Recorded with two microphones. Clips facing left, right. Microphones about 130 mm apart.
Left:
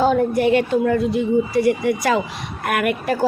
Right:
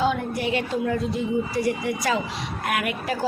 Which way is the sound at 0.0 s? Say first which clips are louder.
Left 8 dB; 45° left (ahead or behind).